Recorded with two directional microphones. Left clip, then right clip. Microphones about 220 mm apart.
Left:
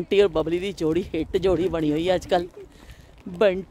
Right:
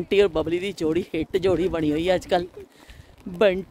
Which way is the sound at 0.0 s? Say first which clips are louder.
Even; centre (ahead or behind).